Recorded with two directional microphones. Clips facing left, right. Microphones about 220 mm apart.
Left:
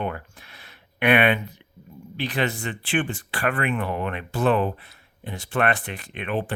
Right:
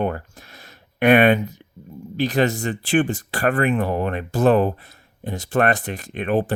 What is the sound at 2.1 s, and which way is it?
Speech, 40° right (ahead or behind).